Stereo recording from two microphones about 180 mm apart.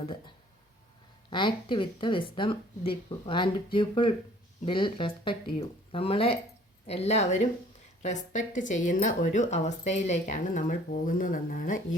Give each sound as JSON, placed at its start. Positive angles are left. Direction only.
{"t": 1.3, "sound": "a woman's voice", "side_deg": 25}